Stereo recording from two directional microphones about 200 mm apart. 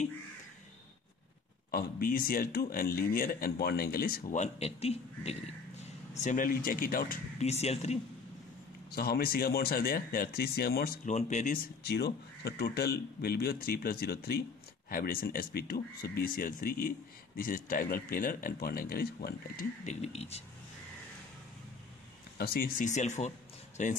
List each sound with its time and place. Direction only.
1.7 s speech: 50° left (ahead or behind)
7.3 s speech: 35° left (ahead or behind)
8.9 s speech: 50° left (ahead or behind)
11.1 s speech: 35° left (ahead or behind)
11.8 s speech: 55° left (ahead or behind)
19.8 s speech: 35° left (ahead or behind)
22.4 s speech: 45° left (ahead or behind)